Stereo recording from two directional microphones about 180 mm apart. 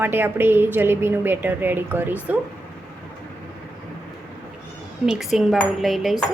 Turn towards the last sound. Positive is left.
turn(degrees=0)  # may be behind; listen again after turning